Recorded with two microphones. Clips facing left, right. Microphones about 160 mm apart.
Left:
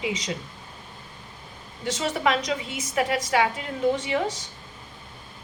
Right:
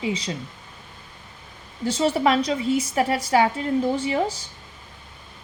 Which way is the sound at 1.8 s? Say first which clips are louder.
Right 5 dB; 30° right (ahead or behind).